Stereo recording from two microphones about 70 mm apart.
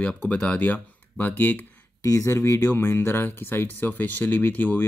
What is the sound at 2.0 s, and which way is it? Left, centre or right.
Speech, left.